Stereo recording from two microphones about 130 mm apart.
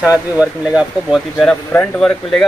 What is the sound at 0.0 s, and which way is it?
Speech, 10° right (ahead or behind).